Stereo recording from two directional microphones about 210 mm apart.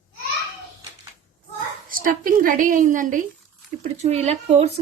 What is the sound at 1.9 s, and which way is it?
A woman's voice, 40° right (ahead or behind).